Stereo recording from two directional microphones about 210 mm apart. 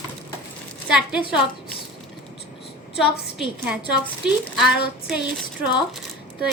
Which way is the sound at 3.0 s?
Centre (ahead or behind).